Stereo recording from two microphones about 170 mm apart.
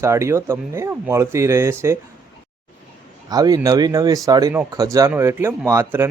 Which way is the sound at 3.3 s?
20° right (ahead or behind).